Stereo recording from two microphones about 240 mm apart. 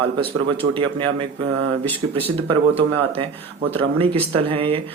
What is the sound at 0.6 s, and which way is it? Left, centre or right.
A man's voice, right.